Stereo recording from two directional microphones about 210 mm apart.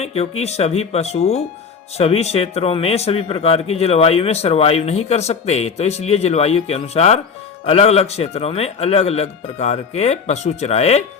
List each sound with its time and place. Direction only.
0.0 s speech: 30° left (ahead or behind)